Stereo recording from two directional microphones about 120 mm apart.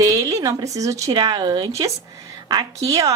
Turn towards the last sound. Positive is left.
turn(degrees=-30)  # may be behind; listen again after turning